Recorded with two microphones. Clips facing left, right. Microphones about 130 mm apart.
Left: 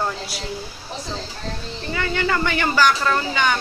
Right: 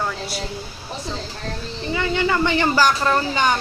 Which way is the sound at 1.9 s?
20° right (ahead or behind).